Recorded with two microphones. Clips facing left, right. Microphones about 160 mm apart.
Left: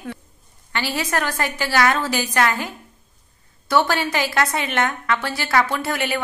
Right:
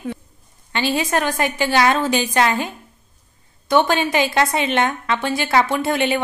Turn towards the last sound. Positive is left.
turn(degrees=-25)  # may be behind; listen again after turning